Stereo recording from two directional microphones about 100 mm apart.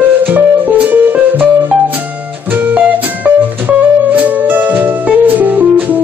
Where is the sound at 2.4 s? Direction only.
15° right (ahead or behind).